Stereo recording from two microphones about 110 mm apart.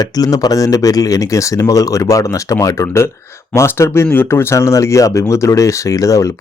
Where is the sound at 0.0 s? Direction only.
35° left (ahead or behind).